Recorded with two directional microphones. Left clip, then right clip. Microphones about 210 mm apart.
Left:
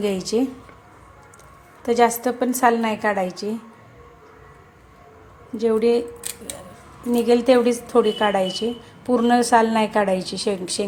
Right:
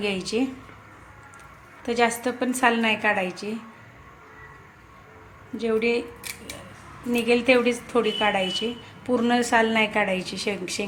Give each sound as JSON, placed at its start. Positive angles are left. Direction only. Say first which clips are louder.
{"t": 0.0, "sound": "a woman's voice", "louder": "left 4 dB", "side_deg": 25}
{"t": 1.8, "sound": "a woman's voice", "louder": "left 5 dB", "side_deg": 25}
{"t": 5.5, "sound": "a woman's voice", "louder": "left 5 dB", "side_deg": 30}
{"t": 7.1, "sound": "a woman's voice", "louder": "left 4 dB", "side_deg": 25}